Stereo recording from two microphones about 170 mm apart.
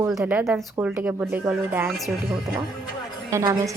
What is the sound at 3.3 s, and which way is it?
Speech, 20° right (ahead or behind).